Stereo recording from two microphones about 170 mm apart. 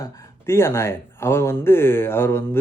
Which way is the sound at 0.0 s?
15° left (ahead or behind).